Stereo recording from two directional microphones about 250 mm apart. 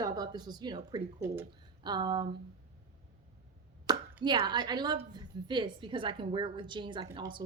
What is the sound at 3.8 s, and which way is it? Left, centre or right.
A woman's voice, centre.